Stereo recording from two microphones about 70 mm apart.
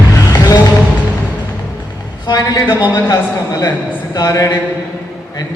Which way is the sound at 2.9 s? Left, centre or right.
Left.